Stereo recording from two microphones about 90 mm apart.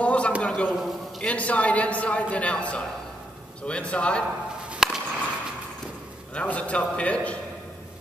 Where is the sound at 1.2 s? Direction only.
15° left (ahead or behind).